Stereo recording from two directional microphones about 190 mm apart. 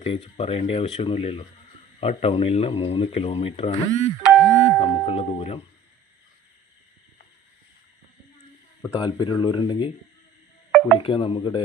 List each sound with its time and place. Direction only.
0.0 s speech: 30° left (ahead or behind)
4.2 s music: centre (ahead or behind)
4.8 s speech: 30° left (ahead or behind)
8.9 s speech: 25° left (ahead or behind)
11.0 s speech: 30° left (ahead or behind)